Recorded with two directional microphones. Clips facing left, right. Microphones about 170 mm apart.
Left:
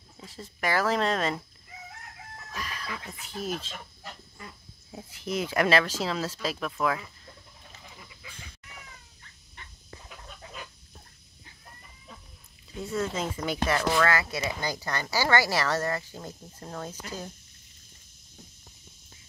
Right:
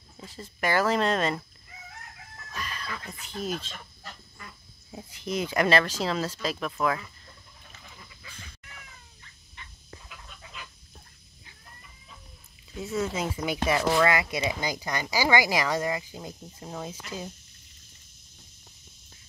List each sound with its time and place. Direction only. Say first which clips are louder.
0.2 s speech: right 1 dB; centre (ahead or behind)
2.5 s music: right 1 dB; centre (ahead or behind)
3.1 s speech: right 1 dB; 5° left (ahead or behind)
10.0 s pig: left 3 dB; 40° left (ahead or behind)
12.8 s speech: right 1 dB; 5° right (ahead or behind)